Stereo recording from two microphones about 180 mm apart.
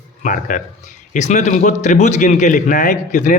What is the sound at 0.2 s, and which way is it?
Speech, 45° left (ahead or behind).